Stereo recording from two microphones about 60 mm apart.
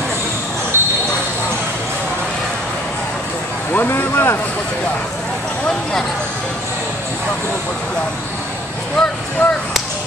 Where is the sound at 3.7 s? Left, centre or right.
Left.